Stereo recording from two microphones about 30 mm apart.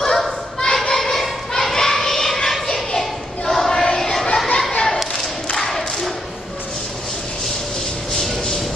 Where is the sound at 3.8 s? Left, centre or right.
Left.